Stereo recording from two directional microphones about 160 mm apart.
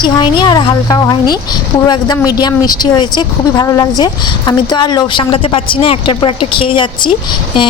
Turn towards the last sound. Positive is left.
turn(degrees=30)  # may be behind; listen again after turning